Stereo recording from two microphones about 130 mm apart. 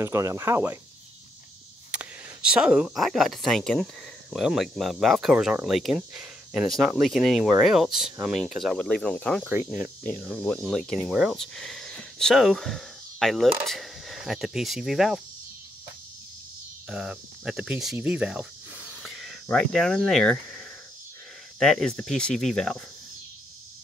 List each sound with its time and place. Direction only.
0.0 s speech: 25° right (ahead or behind)
1.9 s speech: 10° right (ahead or behind)
16.9 s speech: 5° right (ahead or behind)